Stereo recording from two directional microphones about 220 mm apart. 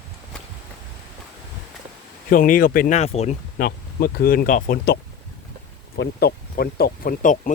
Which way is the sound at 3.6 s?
40° left (ahead or behind).